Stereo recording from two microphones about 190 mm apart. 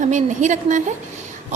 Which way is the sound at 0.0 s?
40° right (ahead or behind).